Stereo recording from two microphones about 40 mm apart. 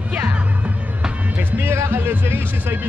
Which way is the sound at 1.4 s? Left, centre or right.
Right.